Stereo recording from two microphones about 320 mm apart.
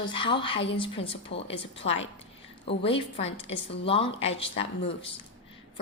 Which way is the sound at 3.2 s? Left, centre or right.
Left.